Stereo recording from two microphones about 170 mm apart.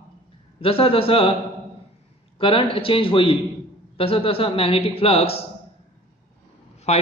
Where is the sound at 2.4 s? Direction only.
30° left (ahead or behind).